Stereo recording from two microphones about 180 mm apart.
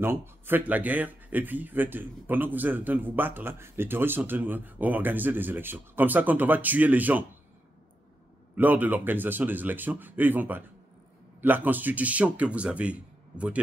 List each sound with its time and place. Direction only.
0.0 s speech: 10° right (ahead or behind)
8.5 s speech: 10° right (ahead or behind)